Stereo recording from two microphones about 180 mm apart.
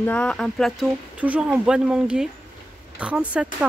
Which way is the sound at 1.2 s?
5° right (ahead or behind).